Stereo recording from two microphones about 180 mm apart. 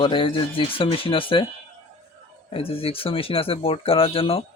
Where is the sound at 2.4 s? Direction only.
30° left (ahead or behind).